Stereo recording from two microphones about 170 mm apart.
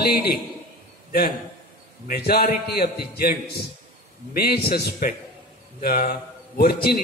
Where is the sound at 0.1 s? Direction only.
65° left (ahead or behind).